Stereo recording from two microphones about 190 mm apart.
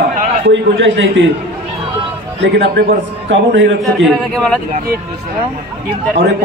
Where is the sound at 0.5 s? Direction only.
75° right (ahead or behind).